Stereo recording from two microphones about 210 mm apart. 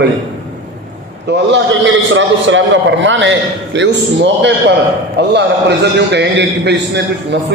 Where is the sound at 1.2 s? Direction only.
60° right (ahead or behind).